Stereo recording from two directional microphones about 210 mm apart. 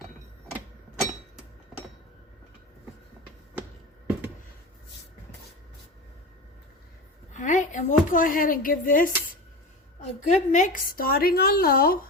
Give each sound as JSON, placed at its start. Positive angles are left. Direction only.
{"t": 7.3, "sound": "a woman's voice", "side_deg": 35}